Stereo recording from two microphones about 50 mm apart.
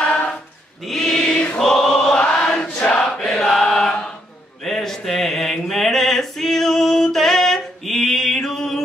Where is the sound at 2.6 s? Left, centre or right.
Left.